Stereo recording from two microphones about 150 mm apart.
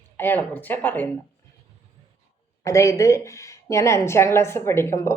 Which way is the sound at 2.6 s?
20° left (ahead or behind).